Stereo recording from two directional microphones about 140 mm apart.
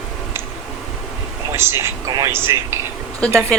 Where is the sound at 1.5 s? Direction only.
20° right (ahead or behind).